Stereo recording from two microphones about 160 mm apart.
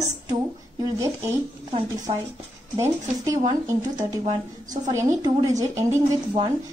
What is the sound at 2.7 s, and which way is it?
Speech, 20° right (ahead or behind).